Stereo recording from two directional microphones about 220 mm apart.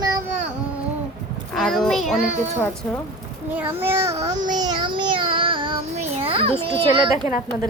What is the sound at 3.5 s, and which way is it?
Speech, 10° right (ahead or behind).